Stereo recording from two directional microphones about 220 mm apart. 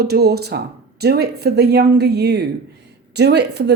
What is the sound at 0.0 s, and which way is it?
Speech, 45° right (ahead or behind).